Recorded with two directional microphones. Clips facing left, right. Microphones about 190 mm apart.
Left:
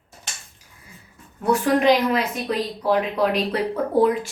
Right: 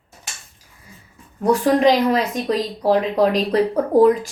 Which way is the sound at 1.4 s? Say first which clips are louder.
Right 4 dB; 35° right (ahead or behind).